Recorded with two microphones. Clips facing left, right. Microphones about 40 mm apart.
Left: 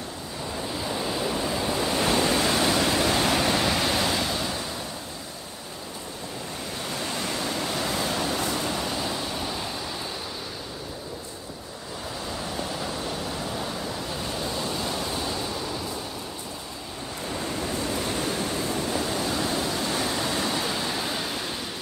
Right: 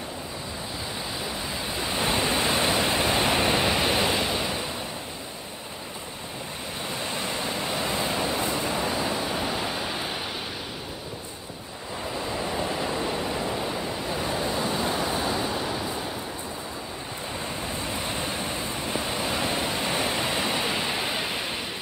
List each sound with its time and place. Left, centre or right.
0.9 s waves: centre; by 4.6 s right
6.8 s waves: centre
9.3 s thunder: right
12.3 s waves: right
17.3 s waves: centre